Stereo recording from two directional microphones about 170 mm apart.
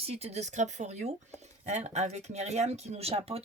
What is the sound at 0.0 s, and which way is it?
Speech, 40° right (ahead or behind).